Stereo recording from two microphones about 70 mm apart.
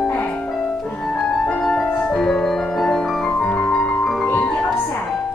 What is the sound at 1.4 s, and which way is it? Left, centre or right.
Music, centre.